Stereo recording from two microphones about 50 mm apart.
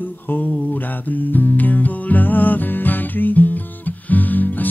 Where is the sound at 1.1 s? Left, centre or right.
Left.